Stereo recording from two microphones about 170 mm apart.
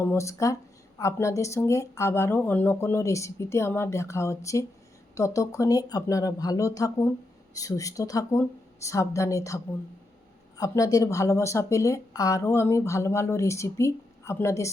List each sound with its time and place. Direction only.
0.0 s speech: 15° left (ahead or behind)
10.6 s speech: 20° left (ahead or behind)